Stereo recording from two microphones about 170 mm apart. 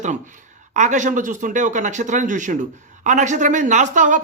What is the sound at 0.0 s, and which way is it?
Speech, 45° right (ahead or behind).